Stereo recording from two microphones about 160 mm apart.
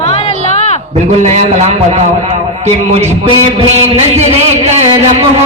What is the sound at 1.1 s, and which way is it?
Speech, 45° right (ahead or behind).